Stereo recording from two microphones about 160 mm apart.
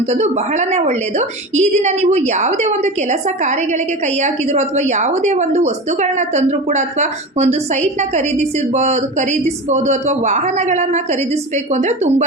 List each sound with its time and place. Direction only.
0.0 s a woman's voice: 45° right (ahead or behind)